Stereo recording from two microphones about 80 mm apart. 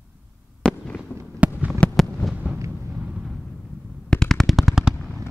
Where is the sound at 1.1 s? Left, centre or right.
Left.